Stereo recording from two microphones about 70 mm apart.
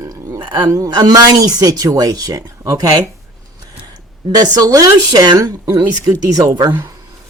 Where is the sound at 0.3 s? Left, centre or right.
Right.